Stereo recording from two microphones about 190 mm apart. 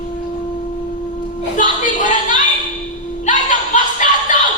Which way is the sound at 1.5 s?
45° left (ahead or behind).